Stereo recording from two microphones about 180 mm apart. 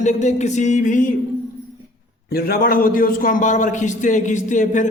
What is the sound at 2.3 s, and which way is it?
A man's voice, 55° left (ahead or behind).